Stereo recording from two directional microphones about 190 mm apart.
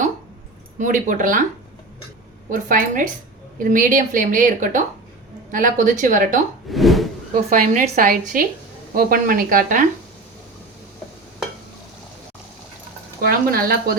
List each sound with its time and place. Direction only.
0.8 s a woman's voice: 40° right (ahead or behind)
2.5 s a woman's voice: 45° right (ahead or behind)
6.7 s a sound: centre (ahead or behind)
7.5 s a woman's voice: 45° right (ahead or behind)
13.2 s a woman's voice: 50° right (ahead or behind)